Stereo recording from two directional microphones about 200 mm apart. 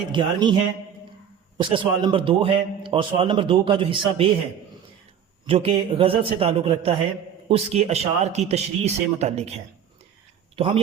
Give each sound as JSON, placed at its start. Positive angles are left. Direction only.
{"t": 0.1, "sound": "a man's voice", "side_deg": -25}
{"t": 1.5, "sound": "a man's voice", "side_deg": -20}
{"t": 5.5, "sound": "a man's voice", "side_deg": -30}
{"t": 10.5, "sound": "speech", "side_deg": -25}